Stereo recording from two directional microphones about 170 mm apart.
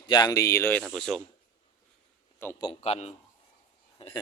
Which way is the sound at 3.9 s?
30° left (ahead or behind).